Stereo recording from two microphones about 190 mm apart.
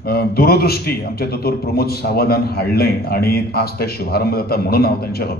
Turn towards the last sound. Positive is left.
turn(degrees=55)  # may be behind; listen again after turning